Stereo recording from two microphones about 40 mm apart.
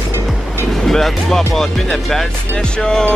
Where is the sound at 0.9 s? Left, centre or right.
Centre.